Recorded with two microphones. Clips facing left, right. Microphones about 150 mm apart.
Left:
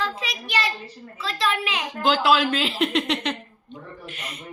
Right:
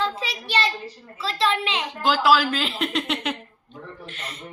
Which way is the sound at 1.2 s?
30° right (ahead or behind).